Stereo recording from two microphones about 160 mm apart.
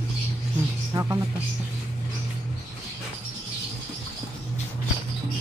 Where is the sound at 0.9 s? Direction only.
20° right (ahead or behind).